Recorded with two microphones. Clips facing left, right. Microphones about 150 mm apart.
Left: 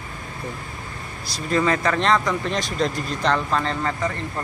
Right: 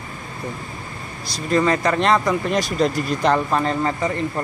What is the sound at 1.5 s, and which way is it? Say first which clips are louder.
Speech: right 2 dB; centre (ahead or behind).